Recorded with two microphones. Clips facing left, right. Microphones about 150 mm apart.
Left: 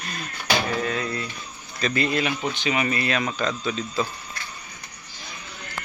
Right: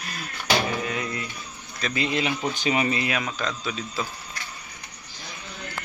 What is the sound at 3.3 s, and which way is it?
Speech, centre (ahead or behind).